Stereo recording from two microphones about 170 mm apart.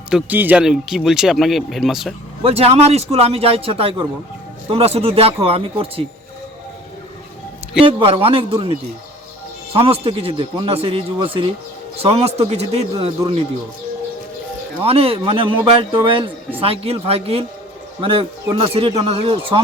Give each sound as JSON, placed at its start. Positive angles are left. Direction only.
{"t": 0.1, "sound": "speech", "side_deg": -10}
{"t": 2.4, "sound": "a man's voice", "side_deg": -35}
{"t": 7.9, "sound": "a man's voice", "side_deg": -30}
{"t": 14.8, "sound": "a man's voice", "side_deg": -35}